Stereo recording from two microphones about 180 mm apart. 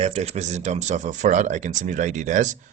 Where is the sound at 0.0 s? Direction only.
35° right (ahead or behind).